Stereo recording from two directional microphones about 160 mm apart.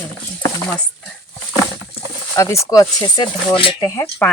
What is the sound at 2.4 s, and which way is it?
Speech, 20° left (ahead or behind).